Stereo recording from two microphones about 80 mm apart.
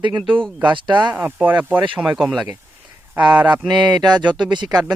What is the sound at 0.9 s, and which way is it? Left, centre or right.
Speech, right.